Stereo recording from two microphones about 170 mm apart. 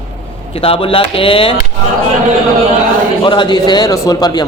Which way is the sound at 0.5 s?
35° left (ahead or behind).